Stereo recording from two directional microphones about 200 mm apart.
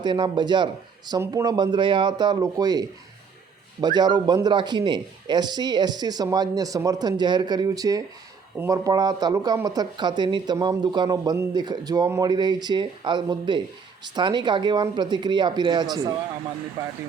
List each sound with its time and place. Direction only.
0.0 s speech: 20° right (ahead or behind)